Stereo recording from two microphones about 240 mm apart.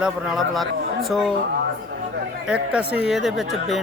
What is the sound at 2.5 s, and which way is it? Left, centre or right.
Speech, centre.